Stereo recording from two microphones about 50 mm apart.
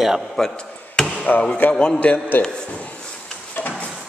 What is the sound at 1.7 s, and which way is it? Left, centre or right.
Speech, left.